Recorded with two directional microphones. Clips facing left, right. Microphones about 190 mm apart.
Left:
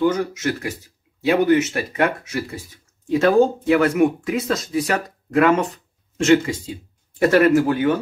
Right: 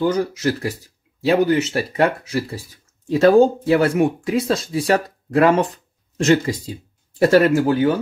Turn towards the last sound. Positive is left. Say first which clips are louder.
# even
turn(degrees=-30)  # may be behind; listen again after turning